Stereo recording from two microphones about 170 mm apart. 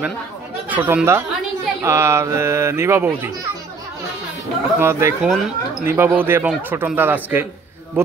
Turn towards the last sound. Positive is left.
turn(degrees=-10)  # may be behind; listen again after turning